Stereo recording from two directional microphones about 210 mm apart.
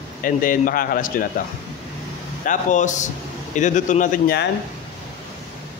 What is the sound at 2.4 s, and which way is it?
A man's voice, 35° left (ahead or behind).